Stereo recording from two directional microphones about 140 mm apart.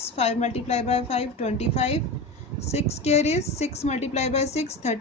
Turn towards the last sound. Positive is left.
turn(degrees=50)  # may be behind; listen again after turning